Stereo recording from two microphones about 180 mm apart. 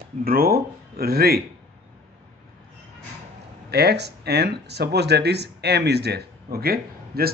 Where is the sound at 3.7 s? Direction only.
65° right (ahead or behind).